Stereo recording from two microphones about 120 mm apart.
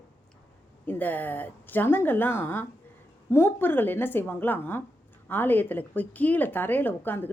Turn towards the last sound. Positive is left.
turn(degrees=15)  # may be behind; listen again after turning